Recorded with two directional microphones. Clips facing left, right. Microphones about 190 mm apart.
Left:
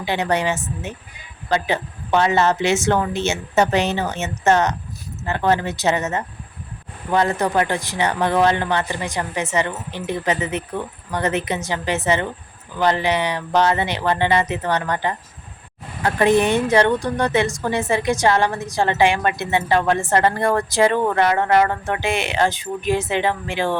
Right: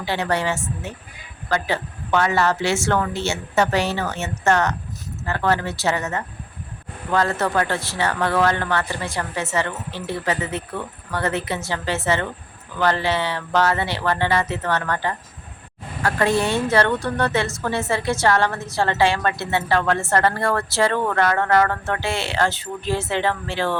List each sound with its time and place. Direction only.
0.0 s a woman's voice: 20° left (ahead or behind)